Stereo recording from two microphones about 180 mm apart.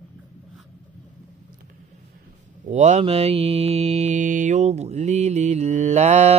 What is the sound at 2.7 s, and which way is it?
Mantra, 40° right (ahead or behind).